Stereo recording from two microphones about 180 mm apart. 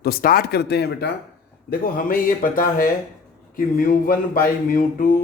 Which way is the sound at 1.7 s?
55° left (ahead or behind).